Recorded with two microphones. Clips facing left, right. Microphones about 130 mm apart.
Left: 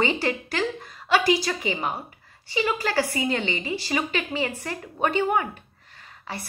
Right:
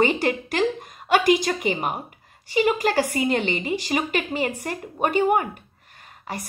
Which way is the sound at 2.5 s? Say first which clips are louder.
Right 4 dB; 45° right (ahead or behind).